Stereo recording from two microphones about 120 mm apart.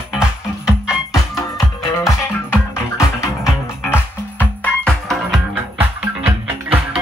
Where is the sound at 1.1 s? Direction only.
30° left (ahead or behind).